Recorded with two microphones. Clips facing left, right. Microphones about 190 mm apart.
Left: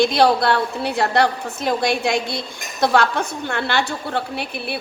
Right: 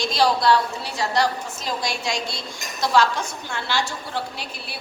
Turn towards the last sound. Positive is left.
turn(degrees=60)  # may be behind; listen again after turning